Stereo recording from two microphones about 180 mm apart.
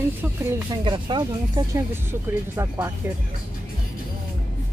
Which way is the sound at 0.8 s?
25° right (ahead or behind).